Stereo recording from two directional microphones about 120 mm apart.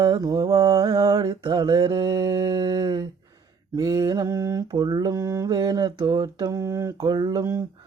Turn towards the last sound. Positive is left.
turn(degrees=-30)  # may be behind; listen again after turning